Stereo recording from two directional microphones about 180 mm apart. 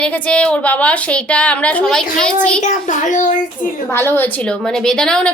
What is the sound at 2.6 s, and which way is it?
A child's voice, 45° left (ahead or behind).